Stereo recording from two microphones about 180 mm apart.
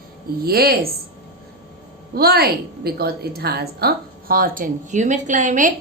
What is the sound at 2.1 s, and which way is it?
A woman's voice, 60° right (ahead or behind).